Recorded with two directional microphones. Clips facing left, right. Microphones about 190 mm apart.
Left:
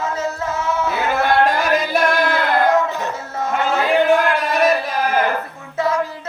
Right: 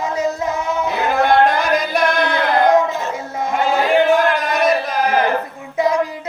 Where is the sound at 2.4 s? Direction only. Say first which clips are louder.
Right 5 dB; 15° right (ahead or behind).